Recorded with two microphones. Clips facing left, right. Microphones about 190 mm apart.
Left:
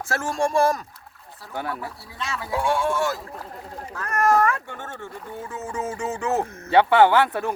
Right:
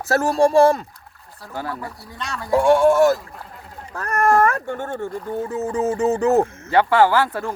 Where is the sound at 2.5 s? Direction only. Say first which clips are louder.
Right 9 dB; 45° right (ahead or behind).